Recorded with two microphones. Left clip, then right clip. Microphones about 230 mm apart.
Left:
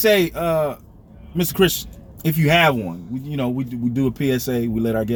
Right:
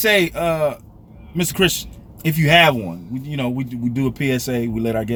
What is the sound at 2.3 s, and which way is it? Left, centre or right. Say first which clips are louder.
Speech: right 3 dB; centre.